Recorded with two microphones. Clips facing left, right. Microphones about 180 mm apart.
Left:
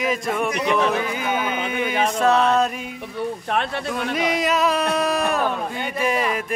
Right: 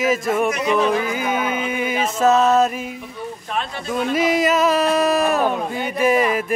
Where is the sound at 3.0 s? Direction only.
65° left (ahead or behind).